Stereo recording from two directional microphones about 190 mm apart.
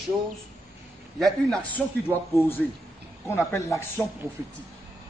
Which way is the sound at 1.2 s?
5° left (ahead or behind).